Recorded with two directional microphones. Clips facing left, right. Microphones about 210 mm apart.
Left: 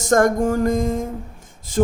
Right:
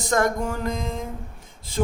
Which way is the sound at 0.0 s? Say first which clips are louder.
Left 6 dB; 45° left (ahead or behind).